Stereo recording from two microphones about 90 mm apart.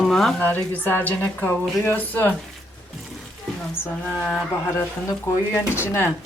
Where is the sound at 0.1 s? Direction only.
5° left (ahead or behind).